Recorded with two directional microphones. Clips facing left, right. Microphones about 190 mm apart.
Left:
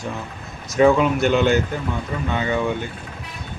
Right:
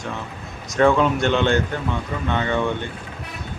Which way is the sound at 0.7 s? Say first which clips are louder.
Left 2 dB; 5° left (ahead or behind).